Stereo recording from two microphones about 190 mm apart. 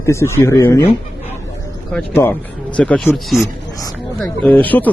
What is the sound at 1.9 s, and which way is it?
Speech, 10° left (ahead or behind).